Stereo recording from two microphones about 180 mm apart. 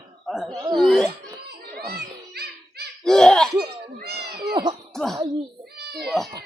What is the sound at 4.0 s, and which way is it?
Cat, 60° right (ahead or behind).